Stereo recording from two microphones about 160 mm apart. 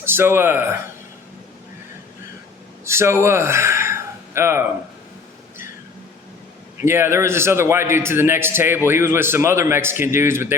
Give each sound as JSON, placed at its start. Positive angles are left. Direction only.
{"t": 0.0, "sound": "speech", "side_deg": -15}
{"t": 2.8, "sound": "speech", "side_deg": -15}
{"t": 6.8, "sound": "a man's voice", "side_deg": -15}